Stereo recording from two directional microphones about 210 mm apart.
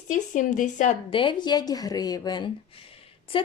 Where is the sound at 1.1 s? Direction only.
25° left (ahead or behind).